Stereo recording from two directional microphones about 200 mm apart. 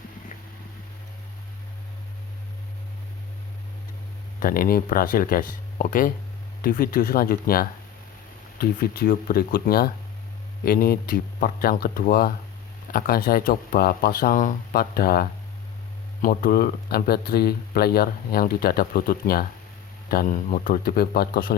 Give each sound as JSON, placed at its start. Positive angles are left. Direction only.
{"t": 4.4, "sound": "speech", "side_deg": 45}